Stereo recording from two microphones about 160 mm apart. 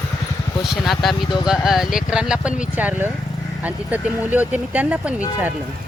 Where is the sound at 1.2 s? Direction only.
30° left (ahead or behind).